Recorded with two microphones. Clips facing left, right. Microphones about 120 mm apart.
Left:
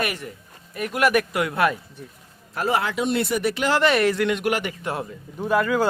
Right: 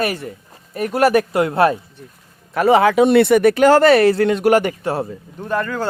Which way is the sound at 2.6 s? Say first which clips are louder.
Right 11 dB; 70° right (ahead or behind).